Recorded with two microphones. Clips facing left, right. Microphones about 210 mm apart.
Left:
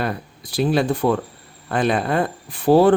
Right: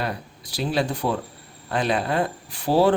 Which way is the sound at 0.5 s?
55° left (ahead or behind).